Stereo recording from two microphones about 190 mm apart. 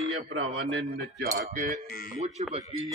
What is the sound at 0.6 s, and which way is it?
Cutlery, 65° right (ahead or behind).